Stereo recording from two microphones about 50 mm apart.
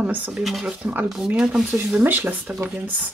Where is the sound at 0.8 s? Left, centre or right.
Right.